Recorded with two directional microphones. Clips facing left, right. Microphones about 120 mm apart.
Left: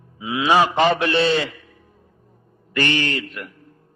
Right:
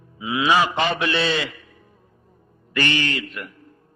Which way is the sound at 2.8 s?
35° left (ahead or behind).